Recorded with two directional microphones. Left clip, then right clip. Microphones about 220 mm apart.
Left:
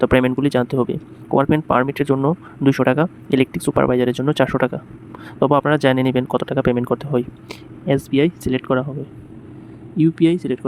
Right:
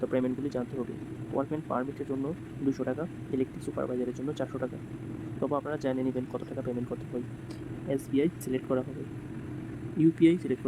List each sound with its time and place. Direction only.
0.0 s speech: 40° left (ahead or behind)
10.0 s speech: 15° left (ahead or behind)